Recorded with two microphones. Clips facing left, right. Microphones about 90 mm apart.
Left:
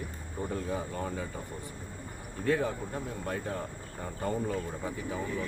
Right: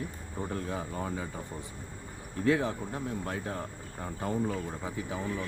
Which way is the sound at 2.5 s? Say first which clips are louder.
Right 1 dB; 15° right (ahead or behind).